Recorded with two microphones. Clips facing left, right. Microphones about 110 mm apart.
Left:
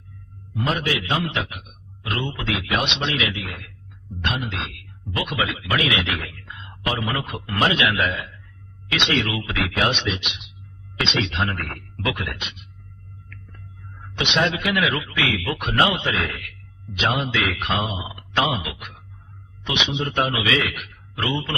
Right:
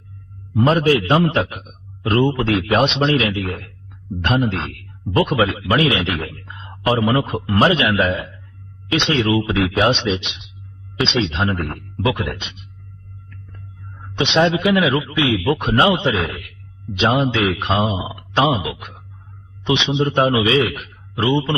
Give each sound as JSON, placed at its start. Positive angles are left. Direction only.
{"t": 0.5, "sound": "speech", "side_deg": -35}
{"t": 11.0, "sound": "speech", "side_deg": -25}
{"t": 14.0, "sound": "speech", "side_deg": -25}